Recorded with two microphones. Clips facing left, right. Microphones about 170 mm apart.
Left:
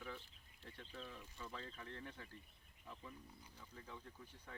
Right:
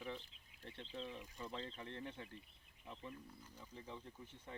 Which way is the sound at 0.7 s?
25° right (ahead or behind).